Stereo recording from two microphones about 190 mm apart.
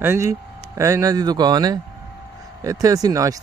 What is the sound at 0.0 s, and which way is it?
Speech, 15° right (ahead or behind).